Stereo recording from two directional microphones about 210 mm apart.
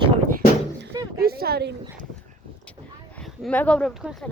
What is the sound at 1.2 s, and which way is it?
Speech, 45° right (ahead or behind).